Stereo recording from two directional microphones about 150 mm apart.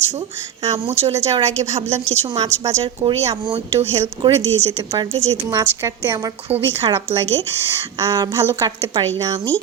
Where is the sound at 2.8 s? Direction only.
35° right (ahead or behind).